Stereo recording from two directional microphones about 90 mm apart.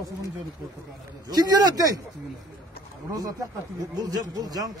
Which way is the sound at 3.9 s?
45° right (ahead or behind).